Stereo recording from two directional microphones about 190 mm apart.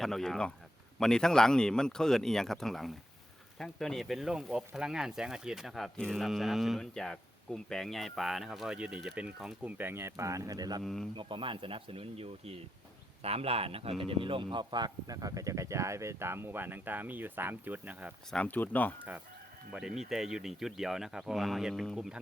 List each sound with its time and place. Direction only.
0.0 s speech: centre (ahead or behind); by 10.8 s 20° right (ahead or behind)
10.8 s speech: centre (ahead or behind)
11.2 s speech: 25° right (ahead or behind); by 18.1 s 10° right (ahead or behind)
18.3 s speech: 5° left (ahead or behind)
19.7 s speech: 5° right (ahead or behind)